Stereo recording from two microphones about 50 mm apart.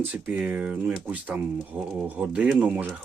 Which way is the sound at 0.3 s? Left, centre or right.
Right.